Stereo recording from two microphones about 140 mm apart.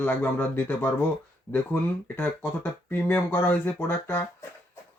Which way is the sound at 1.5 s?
25° left (ahead or behind).